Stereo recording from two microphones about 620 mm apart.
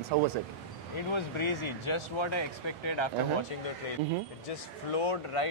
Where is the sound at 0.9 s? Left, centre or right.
Left.